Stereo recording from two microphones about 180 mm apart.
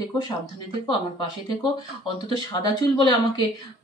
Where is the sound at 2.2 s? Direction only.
25° left (ahead or behind).